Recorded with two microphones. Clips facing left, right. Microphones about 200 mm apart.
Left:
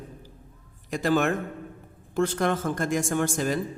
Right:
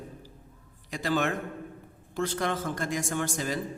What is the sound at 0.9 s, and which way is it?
A man's voice, 50° left (ahead or behind).